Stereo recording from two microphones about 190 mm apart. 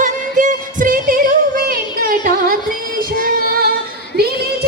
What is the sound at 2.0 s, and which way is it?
Music, 45° right (ahead or behind).